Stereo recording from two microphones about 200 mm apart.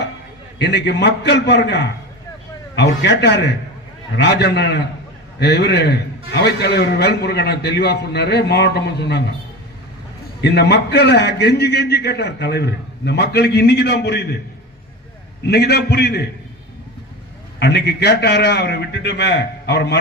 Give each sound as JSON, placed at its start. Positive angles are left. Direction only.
{"t": 0.6, "sound": "a man's voice", "side_deg": 55}
{"t": 10.4, "sound": "a man's voice", "side_deg": 55}
{"t": 15.4, "sound": "a man's voice", "side_deg": 55}
{"t": 17.6, "sound": "a man's voice", "side_deg": 55}